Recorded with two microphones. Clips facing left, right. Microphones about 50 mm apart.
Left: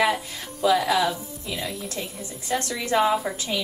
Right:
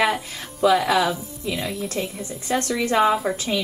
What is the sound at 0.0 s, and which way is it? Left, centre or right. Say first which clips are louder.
Speech: right 1 dB; centre.